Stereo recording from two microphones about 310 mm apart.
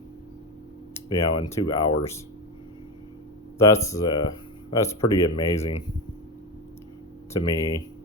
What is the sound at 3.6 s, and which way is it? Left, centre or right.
Speech, centre.